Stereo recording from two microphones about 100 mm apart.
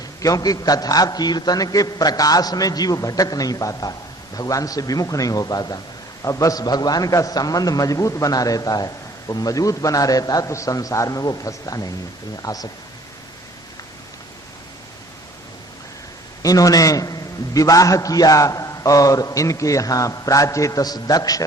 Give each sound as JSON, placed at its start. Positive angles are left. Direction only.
{"t": 0.2, "sound": "a man's voice", "side_deg": 35}
{"t": 16.4, "sound": "a man's voice", "side_deg": 35}